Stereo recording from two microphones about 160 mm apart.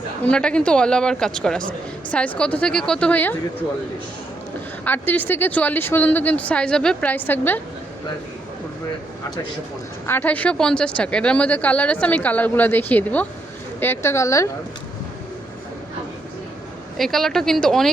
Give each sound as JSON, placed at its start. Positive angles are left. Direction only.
{"t": 0.3, "sound": "a woman's voice", "side_deg": 5}
{"t": 4.9, "sound": "a woman's voice", "side_deg": 10}
{"t": 10.1, "sound": "a woman's voice", "side_deg": 10}
{"t": 17.0, "sound": "a woman's voice", "side_deg": 0}